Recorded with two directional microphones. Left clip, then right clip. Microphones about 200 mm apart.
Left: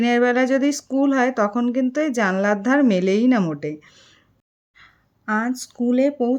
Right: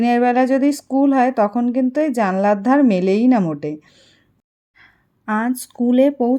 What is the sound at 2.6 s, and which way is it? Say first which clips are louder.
Speech: right 3 dB; 35° left (ahead or behind).